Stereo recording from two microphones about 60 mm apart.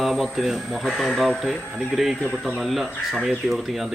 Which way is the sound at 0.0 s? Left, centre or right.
Centre.